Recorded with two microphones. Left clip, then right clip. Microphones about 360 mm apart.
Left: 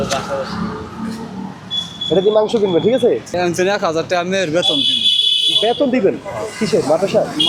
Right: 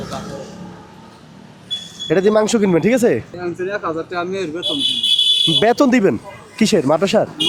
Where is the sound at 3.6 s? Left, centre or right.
Left.